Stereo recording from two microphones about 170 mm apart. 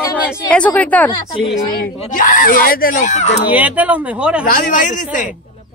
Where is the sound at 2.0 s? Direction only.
50° left (ahead or behind).